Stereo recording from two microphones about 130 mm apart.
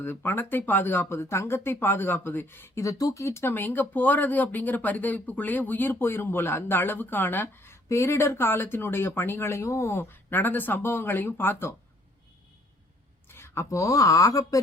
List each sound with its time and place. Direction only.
0.0 s speech: 15° left (ahead or behind)
13.2 s speech: 20° left (ahead or behind)